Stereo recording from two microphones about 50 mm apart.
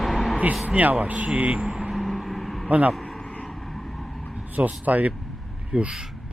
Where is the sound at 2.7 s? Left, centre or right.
Right.